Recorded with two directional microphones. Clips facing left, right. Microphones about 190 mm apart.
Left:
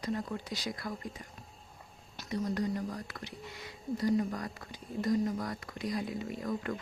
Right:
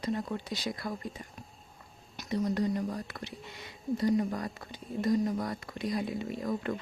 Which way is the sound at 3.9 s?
25° right (ahead or behind).